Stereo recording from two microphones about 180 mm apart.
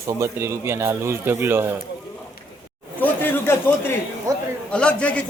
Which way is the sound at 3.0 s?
10° left (ahead or behind).